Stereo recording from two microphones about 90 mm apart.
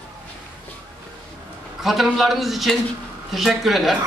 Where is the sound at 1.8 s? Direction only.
Centre (ahead or behind).